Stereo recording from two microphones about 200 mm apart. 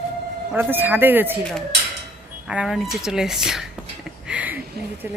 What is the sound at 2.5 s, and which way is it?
Speech, 5° right (ahead or behind).